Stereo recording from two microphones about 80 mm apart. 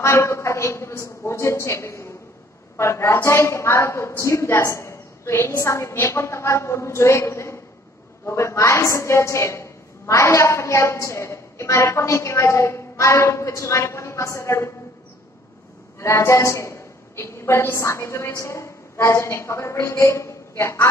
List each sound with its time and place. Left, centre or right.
0.0 s a woman's voice: left
4.6 s a sound: left
5.6 s a woman's voice: left
16.0 s a woman's voice: left